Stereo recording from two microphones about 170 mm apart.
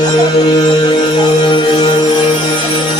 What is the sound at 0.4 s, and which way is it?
Music, 30° left (ahead or behind).